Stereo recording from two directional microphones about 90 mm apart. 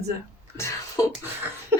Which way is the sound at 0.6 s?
30° left (ahead or behind).